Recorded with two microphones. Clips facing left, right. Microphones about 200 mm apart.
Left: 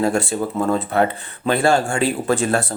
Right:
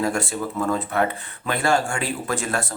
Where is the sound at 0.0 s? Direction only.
30° left (ahead or behind).